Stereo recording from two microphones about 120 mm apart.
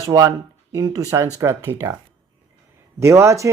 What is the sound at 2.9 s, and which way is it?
Speech, 25° right (ahead or behind).